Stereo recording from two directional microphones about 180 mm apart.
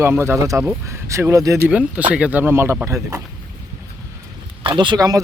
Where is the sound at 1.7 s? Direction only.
5° right (ahead or behind).